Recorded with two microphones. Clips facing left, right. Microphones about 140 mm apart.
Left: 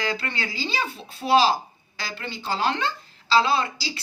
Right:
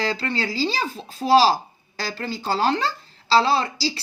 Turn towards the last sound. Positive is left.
turn(degrees=-35)  # may be behind; listen again after turning